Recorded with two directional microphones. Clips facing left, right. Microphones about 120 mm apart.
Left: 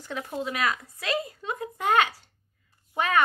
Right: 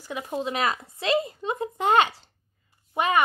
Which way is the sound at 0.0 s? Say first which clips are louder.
Right 2 dB; 10° right (ahead or behind).